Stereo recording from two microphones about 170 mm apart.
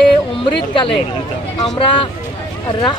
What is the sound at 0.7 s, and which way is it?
Speech, 30° left (ahead or behind).